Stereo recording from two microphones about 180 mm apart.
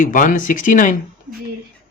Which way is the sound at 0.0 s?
45° left (ahead or behind).